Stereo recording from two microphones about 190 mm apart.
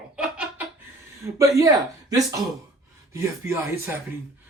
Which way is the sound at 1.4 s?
15° right (ahead or behind).